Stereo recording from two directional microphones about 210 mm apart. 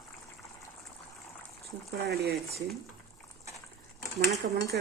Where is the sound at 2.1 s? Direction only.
50° right (ahead or behind).